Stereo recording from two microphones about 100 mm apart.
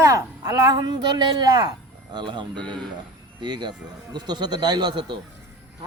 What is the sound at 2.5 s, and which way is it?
Speech, 10° left (ahead or behind).